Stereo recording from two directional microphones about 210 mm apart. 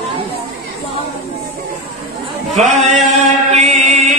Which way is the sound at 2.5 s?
35° right (ahead or behind).